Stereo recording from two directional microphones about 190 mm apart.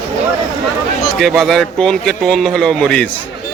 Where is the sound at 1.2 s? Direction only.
Centre (ahead or behind).